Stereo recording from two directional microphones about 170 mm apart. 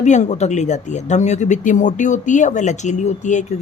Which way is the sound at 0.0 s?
45° left (ahead or behind).